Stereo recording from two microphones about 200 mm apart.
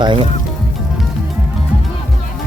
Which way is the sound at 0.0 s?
25° right (ahead or behind).